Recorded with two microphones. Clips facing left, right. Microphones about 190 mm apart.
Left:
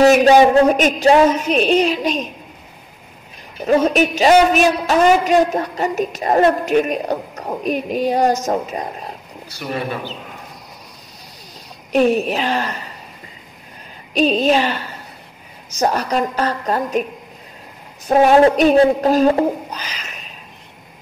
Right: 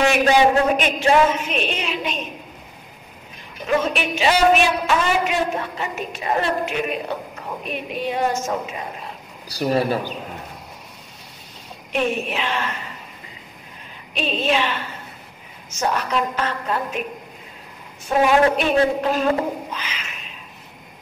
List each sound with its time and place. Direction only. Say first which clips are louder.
0.0 s a man's voice: left 6 dB; 40° left (ahead or behind)
3.6 s a man's voice: left 7 dB; 40° left (ahead or behind)
9.5 s speech: right 5 dB; 35° right (ahead or behind)
11.9 s a man's voice: left 8 dB; 40° left (ahead or behind)
14.1 s a man's voice: left 7 dB; 40° left (ahead or behind)
18.0 s a man's voice: left 5 dB; 40° left (ahead or behind)